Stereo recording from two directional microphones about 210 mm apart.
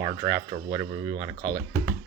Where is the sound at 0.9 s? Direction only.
55° right (ahead or behind).